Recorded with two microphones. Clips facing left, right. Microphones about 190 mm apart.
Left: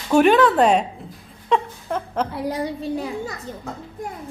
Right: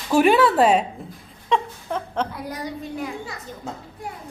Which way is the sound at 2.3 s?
30° left (ahead or behind).